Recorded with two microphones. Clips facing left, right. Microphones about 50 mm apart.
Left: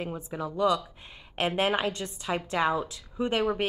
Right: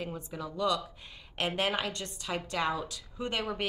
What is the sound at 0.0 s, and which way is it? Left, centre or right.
A woman's voice, left.